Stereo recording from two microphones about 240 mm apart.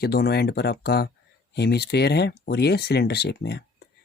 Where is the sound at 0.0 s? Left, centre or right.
Left.